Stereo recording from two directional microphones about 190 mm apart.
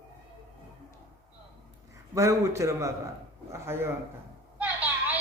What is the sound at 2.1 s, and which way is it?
A man's voice, 15° right (ahead or behind).